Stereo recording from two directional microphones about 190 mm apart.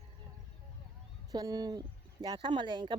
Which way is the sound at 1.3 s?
20° right (ahead or behind).